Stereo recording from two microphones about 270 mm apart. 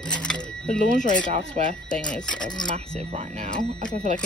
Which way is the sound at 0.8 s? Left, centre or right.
Left.